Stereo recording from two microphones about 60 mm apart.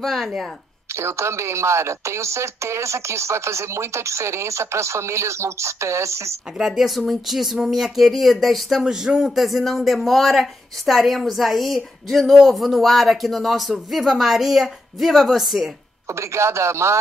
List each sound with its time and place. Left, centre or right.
0.0 s a woman's voice: centre
0.9 s speech: right
6.6 s a woman's voice: centre
16.1 s speech: right